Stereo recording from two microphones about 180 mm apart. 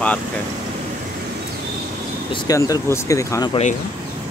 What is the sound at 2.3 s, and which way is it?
Speech, 20° left (ahead or behind).